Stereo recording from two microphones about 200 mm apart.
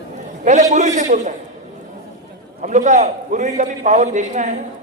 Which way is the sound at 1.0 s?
35° right (ahead or behind).